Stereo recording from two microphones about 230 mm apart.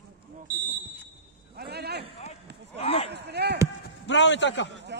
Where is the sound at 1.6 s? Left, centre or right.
Right.